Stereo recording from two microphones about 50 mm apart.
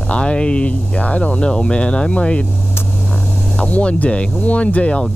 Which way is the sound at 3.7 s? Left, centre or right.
Left.